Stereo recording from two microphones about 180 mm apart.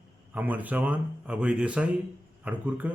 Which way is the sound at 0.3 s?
10° right (ahead or behind).